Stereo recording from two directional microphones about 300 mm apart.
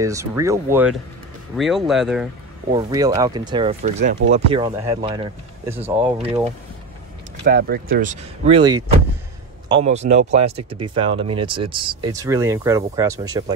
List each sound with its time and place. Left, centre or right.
0.0 s speech: centre
2.7 s speech: centre
7.4 s speech: right; by 13.6 s centre